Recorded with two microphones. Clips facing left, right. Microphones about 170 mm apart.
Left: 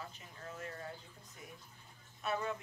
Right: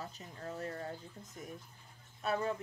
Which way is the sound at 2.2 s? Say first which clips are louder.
Right 3 dB; 35° right (ahead or behind).